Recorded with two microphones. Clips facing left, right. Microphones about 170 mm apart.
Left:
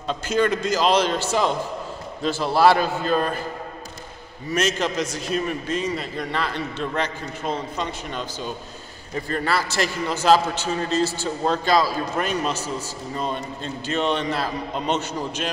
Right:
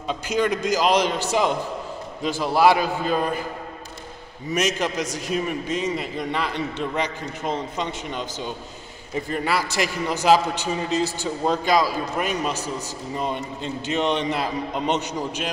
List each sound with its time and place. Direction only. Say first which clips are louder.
0.1 s a man's voice: left 1 dB; 15° right (ahead or behind)
4.5 s a man's voice: even; 15° right (ahead or behind)